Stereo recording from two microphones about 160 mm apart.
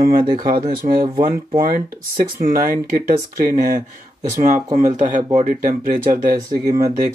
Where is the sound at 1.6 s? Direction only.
65° right (ahead or behind).